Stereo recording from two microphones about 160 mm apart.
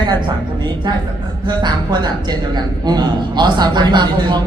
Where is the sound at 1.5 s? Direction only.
25° right (ahead or behind).